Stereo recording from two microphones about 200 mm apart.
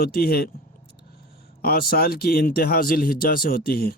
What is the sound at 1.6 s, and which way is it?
Speech, 50° left (ahead or behind).